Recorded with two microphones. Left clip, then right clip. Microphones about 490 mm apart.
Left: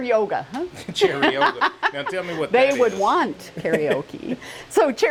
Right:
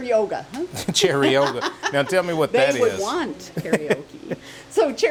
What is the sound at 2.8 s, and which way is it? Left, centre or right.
Speech, left.